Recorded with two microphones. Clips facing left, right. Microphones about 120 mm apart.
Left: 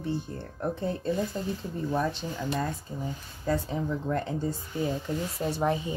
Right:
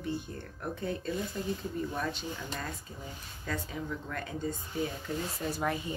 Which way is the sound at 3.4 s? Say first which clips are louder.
Left 8 dB; 30° left (ahead or behind).